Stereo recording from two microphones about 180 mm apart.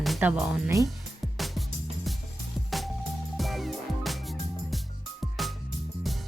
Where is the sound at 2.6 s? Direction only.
Centre (ahead or behind).